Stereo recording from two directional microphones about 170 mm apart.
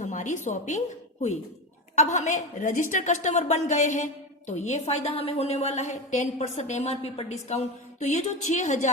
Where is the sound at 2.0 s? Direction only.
45° left (ahead or behind).